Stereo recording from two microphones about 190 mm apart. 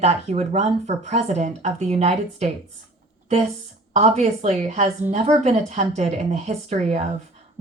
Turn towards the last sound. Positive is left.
turn(degrees=-35)  # may be behind; listen again after turning